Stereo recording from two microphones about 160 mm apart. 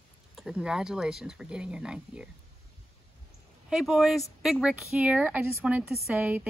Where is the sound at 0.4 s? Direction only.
5° right (ahead or behind).